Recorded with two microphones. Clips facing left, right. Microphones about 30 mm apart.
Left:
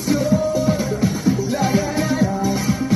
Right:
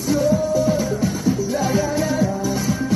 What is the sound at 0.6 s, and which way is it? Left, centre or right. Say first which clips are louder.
Music: even; centre.